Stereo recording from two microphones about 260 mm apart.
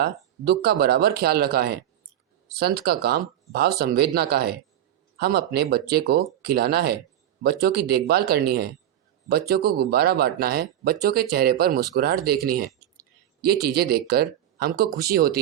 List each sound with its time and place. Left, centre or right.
0.0 s speech: right